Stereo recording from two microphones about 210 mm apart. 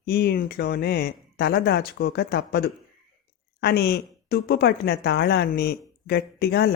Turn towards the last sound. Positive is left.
turn(degrees=50)  # may be behind; listen again after turning